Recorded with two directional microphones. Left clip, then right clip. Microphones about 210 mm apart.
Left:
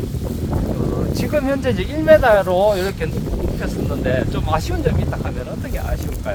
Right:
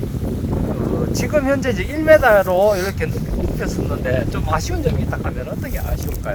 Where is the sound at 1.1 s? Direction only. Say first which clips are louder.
Right 2 dB; 30° right (ahead or behind).